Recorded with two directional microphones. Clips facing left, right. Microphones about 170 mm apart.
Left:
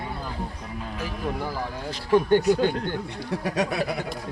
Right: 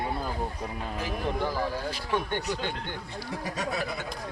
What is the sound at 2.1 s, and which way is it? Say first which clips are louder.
Speech: left 12 dB; 40° left (ahead or behind).